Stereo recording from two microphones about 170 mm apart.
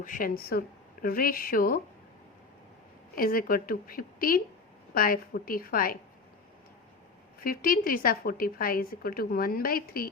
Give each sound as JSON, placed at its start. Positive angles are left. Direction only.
{"t": 0.0, "sound": "a woman's voice", "side_deg": 55}
{"t": 3.2, "sound": "a woman's voice", "side_deg": 60}
{"t": 7.4, "sound": "a woman's voice", "side_deg": 60}